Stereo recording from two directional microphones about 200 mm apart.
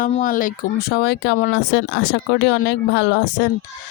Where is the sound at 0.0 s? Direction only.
40° left (ahead or behind).